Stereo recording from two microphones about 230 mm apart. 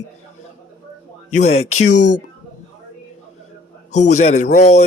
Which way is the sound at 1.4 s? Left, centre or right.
Left.